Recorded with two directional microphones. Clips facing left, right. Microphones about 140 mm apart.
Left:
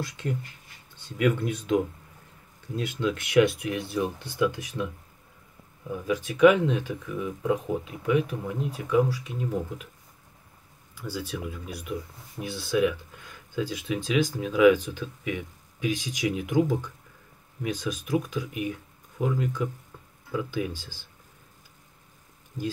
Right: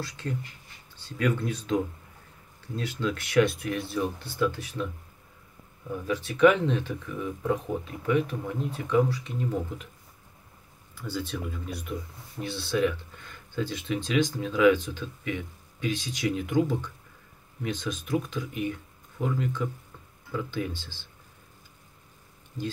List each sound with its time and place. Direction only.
0.0 s speech: 20° left (ahead or behind)
11.0 s speech: 10° left (ahead or behind)